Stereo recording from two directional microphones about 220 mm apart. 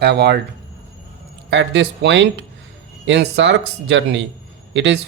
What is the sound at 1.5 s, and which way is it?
Speech, 50° right (ahead or behind).